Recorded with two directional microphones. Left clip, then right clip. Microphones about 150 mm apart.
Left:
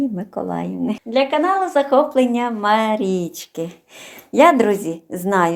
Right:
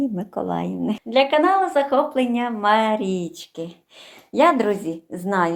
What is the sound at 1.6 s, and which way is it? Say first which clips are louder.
Speech: left 3 dB; 20° left (ahead or behind).